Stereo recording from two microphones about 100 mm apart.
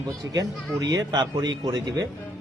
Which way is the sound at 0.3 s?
40° right (ahead or behind).